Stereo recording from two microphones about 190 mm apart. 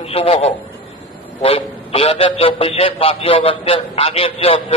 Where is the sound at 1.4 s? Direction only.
30° left (ahead or behind).